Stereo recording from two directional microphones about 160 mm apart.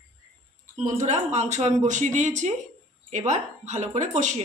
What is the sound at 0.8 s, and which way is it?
A woman's voice, 45° right (ahead or behind).